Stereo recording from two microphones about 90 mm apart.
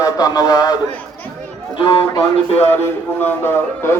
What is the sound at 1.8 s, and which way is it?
Speech, 65° left (ahead or behind).